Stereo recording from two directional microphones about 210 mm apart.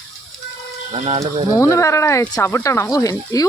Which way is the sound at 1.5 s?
15° left (ahead or behind).